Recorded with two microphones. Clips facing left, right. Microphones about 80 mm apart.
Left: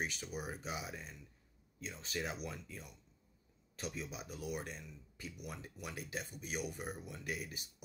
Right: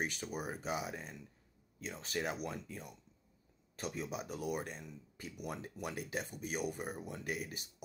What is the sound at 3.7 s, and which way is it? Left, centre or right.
Speech, right.